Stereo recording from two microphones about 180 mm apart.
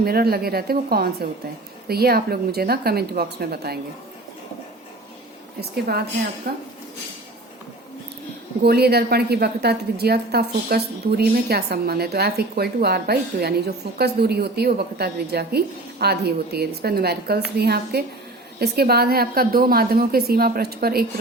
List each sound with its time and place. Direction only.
0.0 s a woman's voice: 60° right (ahead or behind)
5.5 s a woman's voice: 60° right (ahead or behind)
8.6 s a woman's voice: 60° right (ahead or behind)